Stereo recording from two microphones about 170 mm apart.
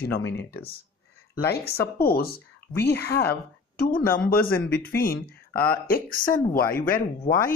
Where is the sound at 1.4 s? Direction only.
65° left (ahead or behind).